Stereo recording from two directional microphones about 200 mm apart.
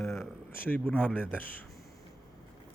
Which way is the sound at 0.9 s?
5° right (ahead or behind).